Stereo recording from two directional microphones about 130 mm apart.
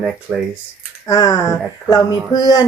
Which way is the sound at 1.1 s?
30° left (ahead or behind).